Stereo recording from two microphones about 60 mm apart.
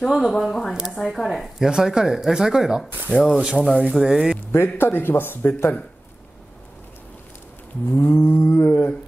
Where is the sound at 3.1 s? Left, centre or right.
Right.